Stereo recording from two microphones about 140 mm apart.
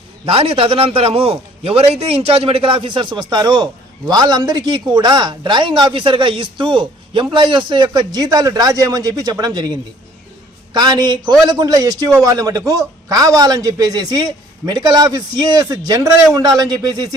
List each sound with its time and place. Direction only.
0.3 s a man's voice: 45° right (ahead or behind); by 9.7 s 30° right (ahead or behind)
10.8 s a man's voice: 30° right (ahead or behind)